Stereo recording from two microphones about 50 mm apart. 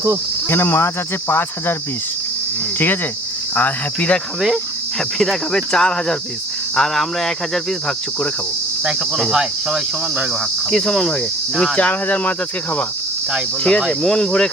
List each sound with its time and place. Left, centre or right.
0.4 s speech: left
2.7 s cricket: left
3.5 s speech: left
4.4 s cricket: centre
8.8 s cricket: centre
10.7 s cricket: centre
11.8 s speech: left
14.0 s cricket: centre